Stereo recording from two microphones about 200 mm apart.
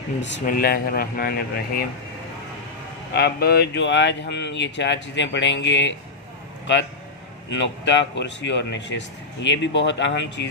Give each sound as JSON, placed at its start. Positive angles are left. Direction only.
{"t": 0.2, "sound": "speech", "side_deg": 65}
{"t": 0.4, "sound": "speech", "side_deg": 45}
{"t": 3.1, "sound": "speech", "side_deg": 55}
{"t": 7.5, "sound": "speech", "side_deg": 65}